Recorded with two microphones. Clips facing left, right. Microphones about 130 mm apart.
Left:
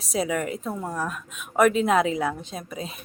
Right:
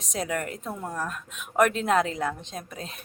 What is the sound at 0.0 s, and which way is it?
A woman's voice, 5° left (ahead or behind).